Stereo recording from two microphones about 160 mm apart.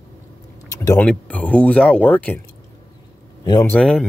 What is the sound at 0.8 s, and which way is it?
Speech, 10° left (ahead or behind).